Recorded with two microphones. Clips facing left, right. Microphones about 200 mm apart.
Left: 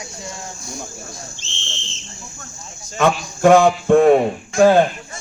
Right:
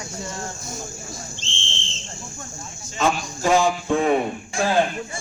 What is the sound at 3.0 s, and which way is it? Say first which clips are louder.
Speech: left 7 dB; 65° left (ahead or behind).